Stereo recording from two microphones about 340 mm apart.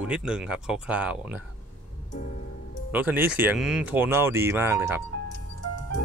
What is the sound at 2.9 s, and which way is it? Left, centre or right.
Speech, centre.